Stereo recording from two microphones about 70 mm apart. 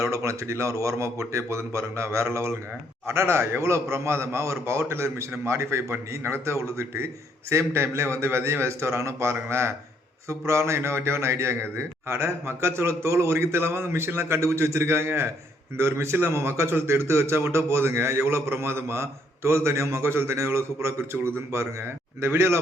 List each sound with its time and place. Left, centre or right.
0.0 s a man's voice: right